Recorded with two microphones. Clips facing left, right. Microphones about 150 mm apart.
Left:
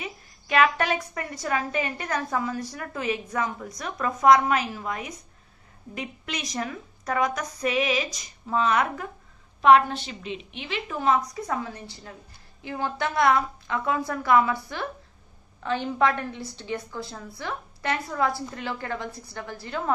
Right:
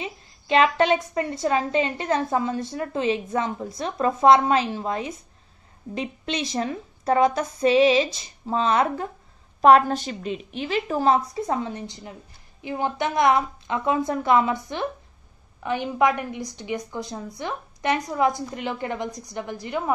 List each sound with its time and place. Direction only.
0.0 s a woman's voice: 25° right (ahead or behind)
9.6 s a woman's voice: 40° right (ahead or behind); by 19.8 s 15° right (ahead or behind)